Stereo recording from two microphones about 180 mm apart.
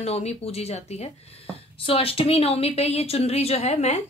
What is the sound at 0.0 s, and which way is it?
Speech, 35° left (ahead or behind).